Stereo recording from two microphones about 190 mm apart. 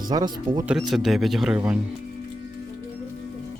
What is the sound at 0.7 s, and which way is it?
Speech, centre (ahead or behind).